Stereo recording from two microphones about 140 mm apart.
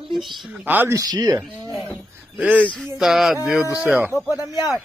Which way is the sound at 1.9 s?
10° right (ahead or behind).